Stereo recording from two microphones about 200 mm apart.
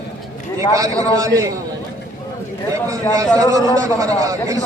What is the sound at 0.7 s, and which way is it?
Speech, 15° right (ahead or behind).